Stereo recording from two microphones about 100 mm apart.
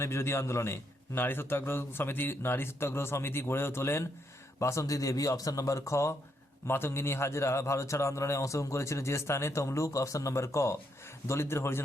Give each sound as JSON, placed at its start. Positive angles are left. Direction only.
{"t": 0.0, "sound": "a man's voice", "side_deg": 25}